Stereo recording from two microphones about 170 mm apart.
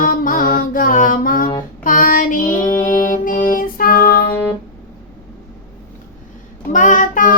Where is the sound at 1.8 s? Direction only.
55° left (ahead or behind).